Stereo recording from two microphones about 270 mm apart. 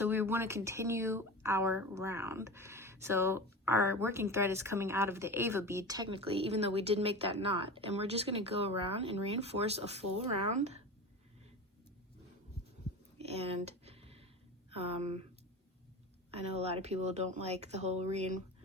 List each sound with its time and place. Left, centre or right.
0.0 s speech: centre
13.1 s a sound: right
14.8 s speech: right
16.3 s speech: right